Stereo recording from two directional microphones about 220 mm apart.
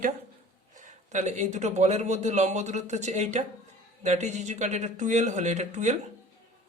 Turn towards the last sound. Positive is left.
turn(degrees=-30)  # may be behind; listen again after turning